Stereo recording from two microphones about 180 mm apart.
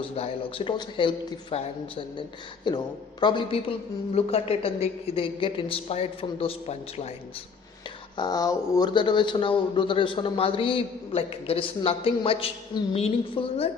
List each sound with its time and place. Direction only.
0.2 s speech: 30° left (ahead or behind)
2.6 s a woman's voice: 25° left (ahead or behind)
8.1 s speech: 25° left (ahead or behind)